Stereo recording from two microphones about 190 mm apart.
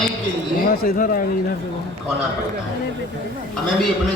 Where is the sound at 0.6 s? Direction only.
50° left (ahead or behind).